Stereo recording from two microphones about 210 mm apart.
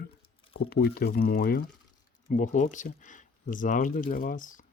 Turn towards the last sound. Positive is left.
turn(degrees=40)  # may be behind; listen again after turning